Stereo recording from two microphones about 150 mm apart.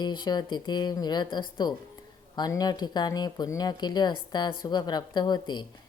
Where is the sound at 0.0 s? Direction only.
30° left (ahead or behind).